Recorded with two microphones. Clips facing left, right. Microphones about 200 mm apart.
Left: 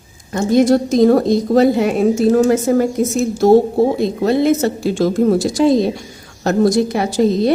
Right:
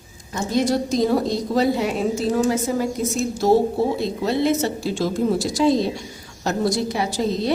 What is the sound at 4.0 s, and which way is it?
A woman's voice, 50° left (ahead or behind).